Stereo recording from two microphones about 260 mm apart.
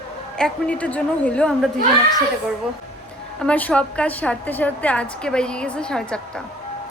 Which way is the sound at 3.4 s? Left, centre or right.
Centre.